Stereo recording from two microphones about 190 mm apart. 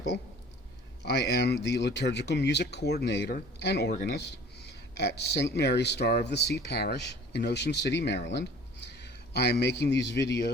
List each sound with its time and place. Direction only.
1.0 s speech: 60° left (ahead or behind)